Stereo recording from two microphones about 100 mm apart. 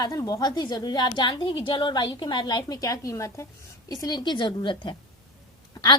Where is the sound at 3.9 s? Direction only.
40° left (ahead or behind).